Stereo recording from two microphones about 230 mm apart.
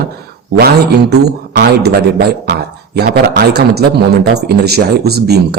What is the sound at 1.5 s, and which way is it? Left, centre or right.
A man's voice, right.